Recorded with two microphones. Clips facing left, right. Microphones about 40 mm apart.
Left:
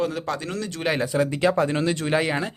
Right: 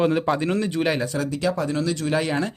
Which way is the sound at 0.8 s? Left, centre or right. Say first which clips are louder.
Even; centre.